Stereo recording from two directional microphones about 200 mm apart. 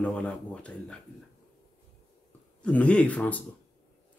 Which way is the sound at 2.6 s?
5° left (ahead or behind).